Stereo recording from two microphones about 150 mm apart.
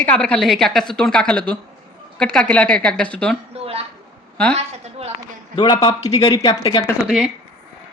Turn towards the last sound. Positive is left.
turn(degrees=-5)  # may be behind; listen again after turning